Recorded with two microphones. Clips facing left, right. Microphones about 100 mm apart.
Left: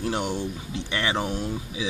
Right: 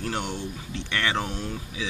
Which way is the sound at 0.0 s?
15° left (ahead or behind).